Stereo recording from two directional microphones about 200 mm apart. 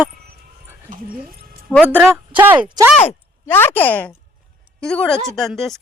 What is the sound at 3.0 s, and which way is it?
A woman's voice, 10° left (ahead or behind).